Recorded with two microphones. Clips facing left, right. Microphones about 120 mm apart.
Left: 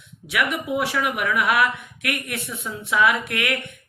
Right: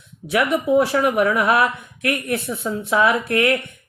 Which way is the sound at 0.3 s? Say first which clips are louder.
Right 6 dB; 35° right (ahead or behind).